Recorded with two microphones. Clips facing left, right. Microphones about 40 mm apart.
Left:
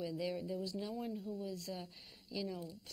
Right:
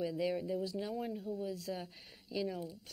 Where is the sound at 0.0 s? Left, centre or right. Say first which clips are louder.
Right 4 dB; centre.